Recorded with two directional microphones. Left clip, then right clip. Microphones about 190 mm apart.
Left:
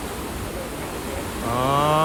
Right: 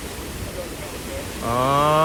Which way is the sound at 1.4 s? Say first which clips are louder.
Right 2 dB; 15° left (ahead or behind).